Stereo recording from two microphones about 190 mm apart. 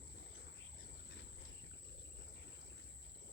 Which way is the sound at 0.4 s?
65° left (ahead or behind).